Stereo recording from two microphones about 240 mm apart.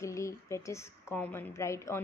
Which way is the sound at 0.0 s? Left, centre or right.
Centre.